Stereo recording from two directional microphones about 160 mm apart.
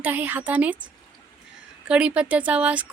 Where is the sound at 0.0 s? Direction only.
10° right (ahead or behind).